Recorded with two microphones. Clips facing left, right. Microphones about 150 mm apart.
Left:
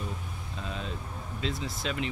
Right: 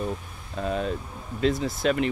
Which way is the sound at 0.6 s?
55° right (ahead or behind).